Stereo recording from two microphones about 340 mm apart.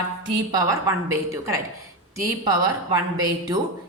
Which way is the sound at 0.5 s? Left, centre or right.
Centre.